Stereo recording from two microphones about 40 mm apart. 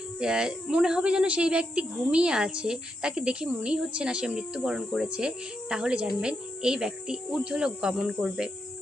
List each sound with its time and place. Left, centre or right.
0.2 s speech: centre
5.0 s speech: right